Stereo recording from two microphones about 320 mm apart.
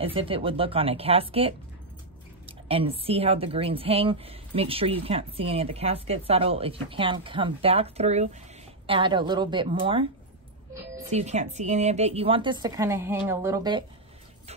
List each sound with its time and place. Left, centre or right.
0.0 s a woman's voice: centre
11.1 s a woman's voice: right